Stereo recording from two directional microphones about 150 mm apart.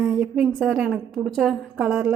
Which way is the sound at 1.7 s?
15° right (ahead or behind).